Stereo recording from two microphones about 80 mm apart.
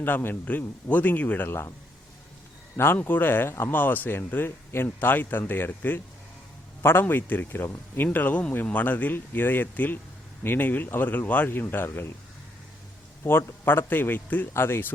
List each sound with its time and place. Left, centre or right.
0.0 s speech: left
2.7 s speech: left
13.2 s speech: left